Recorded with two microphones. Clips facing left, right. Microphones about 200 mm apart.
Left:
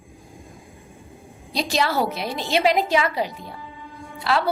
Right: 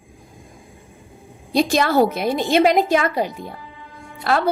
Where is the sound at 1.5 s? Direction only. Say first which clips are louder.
Right 6 dB; 50° right (ahead or behind).